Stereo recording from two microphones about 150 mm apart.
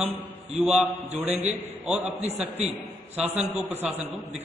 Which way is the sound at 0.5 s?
5° right (ahead or behind).